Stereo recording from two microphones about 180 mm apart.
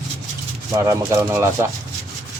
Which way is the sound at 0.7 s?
15° right (ahead or behind).